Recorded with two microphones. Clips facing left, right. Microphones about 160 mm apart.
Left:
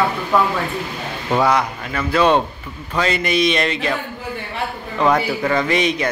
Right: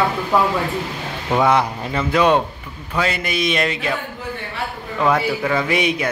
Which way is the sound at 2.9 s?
5° right (ahead or behind).